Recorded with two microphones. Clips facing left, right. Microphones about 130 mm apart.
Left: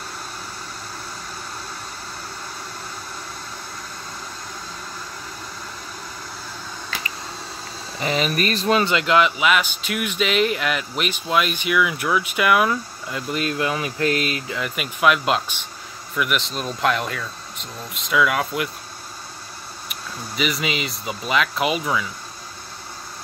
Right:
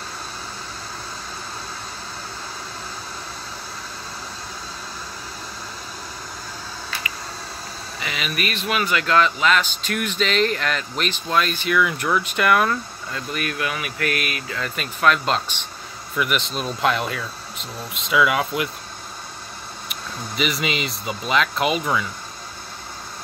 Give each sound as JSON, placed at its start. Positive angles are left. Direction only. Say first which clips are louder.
{"t": 8.0, "sound": "speech", "louder": "left 6 dB", "side_deg": 35}
{"t": 13.1, "sound": "speech", "louder": "left 3 dB", "side_deg": 20}
{"t": 14.6, "sound": "speech", "louder": "even", "side_deg": 10}
{"t": 19.9, "sound": "speech", "louder": "right 1 dB", "side_deg": 0}